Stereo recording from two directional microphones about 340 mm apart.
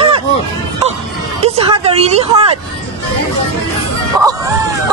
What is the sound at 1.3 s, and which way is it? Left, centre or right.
Speech, centre.